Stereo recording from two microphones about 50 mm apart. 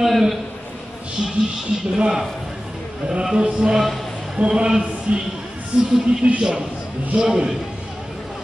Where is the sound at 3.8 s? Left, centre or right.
Centre.